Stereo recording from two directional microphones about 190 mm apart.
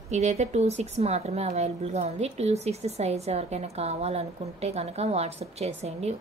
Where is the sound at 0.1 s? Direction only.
35° right (ahead or behind).